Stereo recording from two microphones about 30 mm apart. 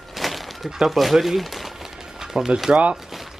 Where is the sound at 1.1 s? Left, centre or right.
Centre.